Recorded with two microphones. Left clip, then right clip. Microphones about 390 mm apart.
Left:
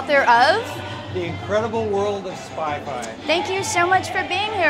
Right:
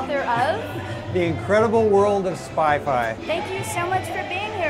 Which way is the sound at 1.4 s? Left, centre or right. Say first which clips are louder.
Right 4 dB; right.